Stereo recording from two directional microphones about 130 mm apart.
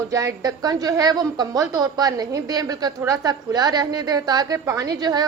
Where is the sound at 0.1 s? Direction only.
25° right (ahead or behind).